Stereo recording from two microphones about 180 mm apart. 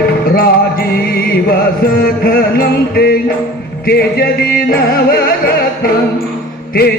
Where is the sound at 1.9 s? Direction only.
55° left (ahead or behind).